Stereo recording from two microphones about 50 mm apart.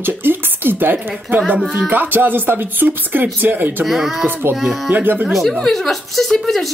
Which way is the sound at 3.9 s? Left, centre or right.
Centre.